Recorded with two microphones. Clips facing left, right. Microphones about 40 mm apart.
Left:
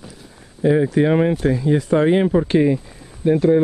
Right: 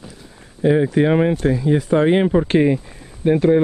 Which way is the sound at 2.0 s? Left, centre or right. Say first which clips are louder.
Even; right.